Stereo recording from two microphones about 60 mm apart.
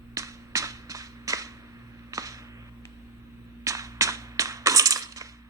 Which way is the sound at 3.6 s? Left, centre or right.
Right.